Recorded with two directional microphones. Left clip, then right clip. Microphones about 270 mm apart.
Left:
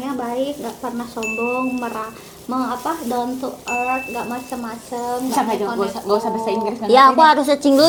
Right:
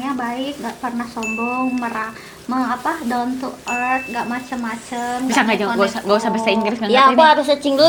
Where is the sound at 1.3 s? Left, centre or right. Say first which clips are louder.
Even; right.